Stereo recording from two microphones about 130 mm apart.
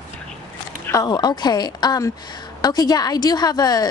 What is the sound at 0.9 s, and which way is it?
A woman's voice, 30° left (ahead or behind).